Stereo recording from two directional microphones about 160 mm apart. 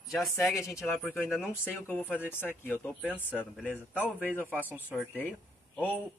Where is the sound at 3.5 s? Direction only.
10° right (ahead or behind).